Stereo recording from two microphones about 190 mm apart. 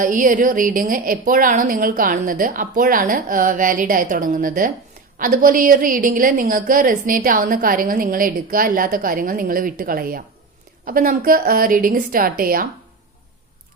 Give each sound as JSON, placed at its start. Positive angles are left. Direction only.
{"t": 0.0, "sound": "a woman's voice", "side_deg": -45}